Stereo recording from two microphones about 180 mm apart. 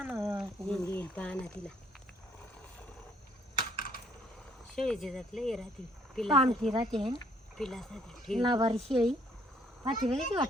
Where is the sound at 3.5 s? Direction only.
55° left (ahead or behind).